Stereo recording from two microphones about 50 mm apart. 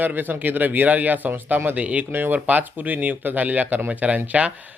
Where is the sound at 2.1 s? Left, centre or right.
Right.